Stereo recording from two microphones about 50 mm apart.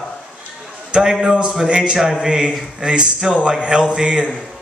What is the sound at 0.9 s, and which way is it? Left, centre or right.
A man's voice, centre.